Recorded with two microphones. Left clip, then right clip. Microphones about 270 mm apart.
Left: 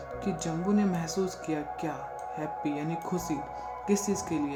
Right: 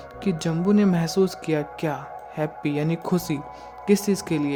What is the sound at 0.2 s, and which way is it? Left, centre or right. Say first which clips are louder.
A woman's voice: right 7 dB; right.